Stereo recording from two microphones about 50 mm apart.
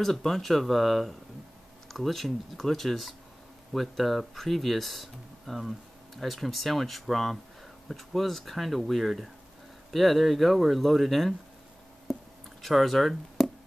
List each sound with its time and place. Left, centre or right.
0.0 s speech: centre
12.1 s a sound: centre
12.6 s speech: centre